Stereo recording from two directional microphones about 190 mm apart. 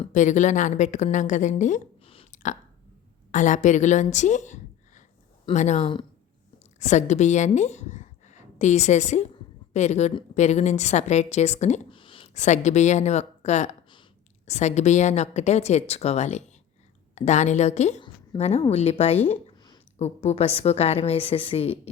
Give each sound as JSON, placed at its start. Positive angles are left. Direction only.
{"t": 0.0, "sound": "a woman's voice", "side_deg": 40}
{"t": 19.3, "sound": "a sound", "side_deg": 25}
{"t": 20.0, "sound": "speech", "side_deg": 35}